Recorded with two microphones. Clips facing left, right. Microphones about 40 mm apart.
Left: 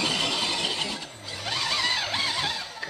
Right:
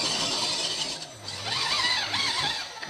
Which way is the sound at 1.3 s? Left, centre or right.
Centre.